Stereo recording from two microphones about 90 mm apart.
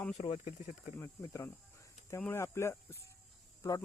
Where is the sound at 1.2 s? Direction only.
35° left (ahead or behind).